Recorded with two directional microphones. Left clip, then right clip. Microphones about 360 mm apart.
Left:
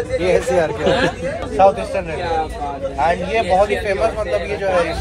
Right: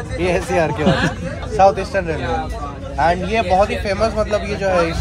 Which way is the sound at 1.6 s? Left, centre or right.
Right.